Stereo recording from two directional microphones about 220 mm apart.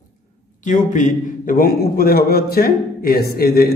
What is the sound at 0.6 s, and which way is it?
A man's voice, 35° left (ahead or behind).